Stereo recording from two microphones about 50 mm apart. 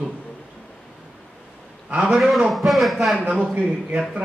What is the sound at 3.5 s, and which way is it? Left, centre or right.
Speech, right.